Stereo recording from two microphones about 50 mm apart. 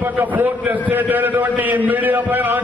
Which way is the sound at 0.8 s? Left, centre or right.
Right.